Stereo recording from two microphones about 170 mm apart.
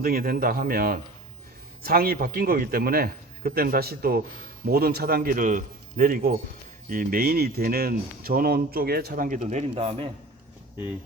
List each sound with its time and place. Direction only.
0.0 s speech: 60° right (ahead or behind); by 10.1 s 35° right (ahead or behind)